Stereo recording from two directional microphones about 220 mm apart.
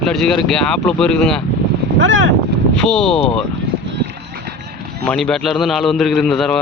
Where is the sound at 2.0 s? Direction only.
60° right (ahead or behind).